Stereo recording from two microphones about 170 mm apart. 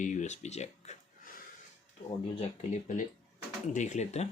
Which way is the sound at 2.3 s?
40° left (ahead or behind).